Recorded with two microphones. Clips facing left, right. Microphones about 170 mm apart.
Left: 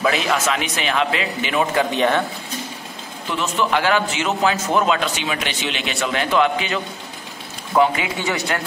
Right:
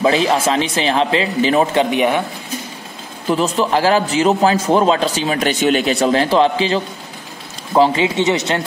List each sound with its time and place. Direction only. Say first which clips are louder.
0.0 s a man's voice: right 5 dB; 30° right (ahead or behind)
1.9 s speech: right 3 dB; 15° right (ahead or behind)
3.3 s a man's voice: right 5 dB; 35° right (ahead or behind)